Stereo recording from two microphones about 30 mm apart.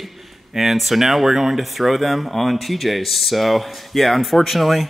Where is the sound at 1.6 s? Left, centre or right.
Centre.